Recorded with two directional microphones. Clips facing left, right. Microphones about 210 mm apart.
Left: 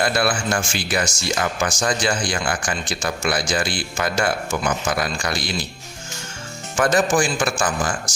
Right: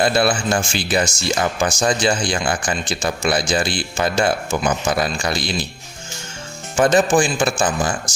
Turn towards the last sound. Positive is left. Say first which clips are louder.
# right 3 dB
turn(degrees=-25)  # may be behind; listen again after turning